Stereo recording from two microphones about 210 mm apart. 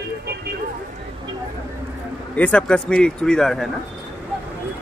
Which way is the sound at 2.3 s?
5° left (ahead or behind).